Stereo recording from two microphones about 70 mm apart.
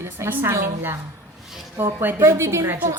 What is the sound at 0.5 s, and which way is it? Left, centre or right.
A woman's voice, right.